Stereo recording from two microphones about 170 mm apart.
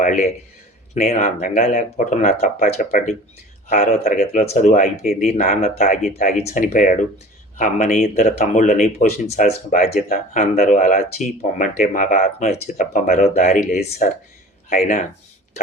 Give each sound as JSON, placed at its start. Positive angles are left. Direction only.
{"t": 0.0, "sound": "speech", "side_deg": 45}
{"t": 2.6, "sound": "speech", "side_deg": 55}
{"t": 3.7, "sound": "speech", "side_deg": 45}